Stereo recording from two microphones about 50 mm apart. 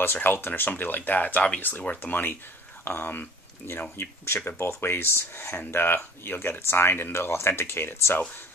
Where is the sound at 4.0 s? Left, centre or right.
Left.